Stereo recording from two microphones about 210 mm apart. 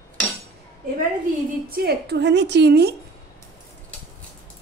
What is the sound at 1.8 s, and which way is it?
A woman's voice, 50° right (ahead or behind).